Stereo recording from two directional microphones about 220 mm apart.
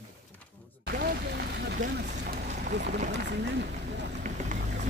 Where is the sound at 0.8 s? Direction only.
45° right (ahead or behind).